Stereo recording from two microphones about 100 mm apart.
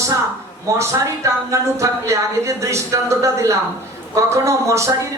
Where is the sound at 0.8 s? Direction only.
30° right (ahead or behind).